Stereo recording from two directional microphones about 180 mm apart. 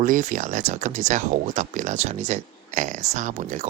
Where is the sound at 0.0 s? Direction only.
45° right (ahead or behind).